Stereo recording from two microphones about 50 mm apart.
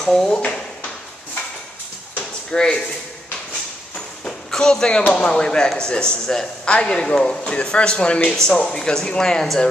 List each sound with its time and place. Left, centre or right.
0.0 s speech: centre
2.5 s speech: centre
4.2 s a sound: centre
5.1 s speech: centre